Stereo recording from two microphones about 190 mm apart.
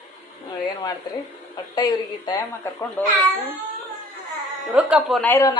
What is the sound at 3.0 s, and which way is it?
Speech, 10° left (ahead or behind).